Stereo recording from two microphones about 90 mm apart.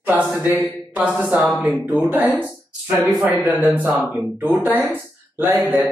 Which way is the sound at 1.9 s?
20° right (ahead or behind).